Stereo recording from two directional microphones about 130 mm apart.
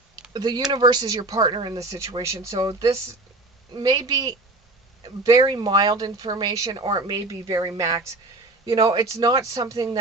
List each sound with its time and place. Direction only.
0.3 s speech: 30° right (ahead or behind)